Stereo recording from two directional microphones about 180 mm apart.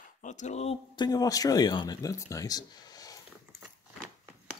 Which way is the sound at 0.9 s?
25° left (ahead or behind).